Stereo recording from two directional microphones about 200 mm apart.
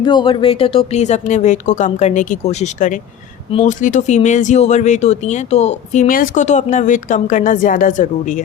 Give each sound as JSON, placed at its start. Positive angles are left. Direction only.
{"t": 0.0, "sound": "speech", "side_deg": 25}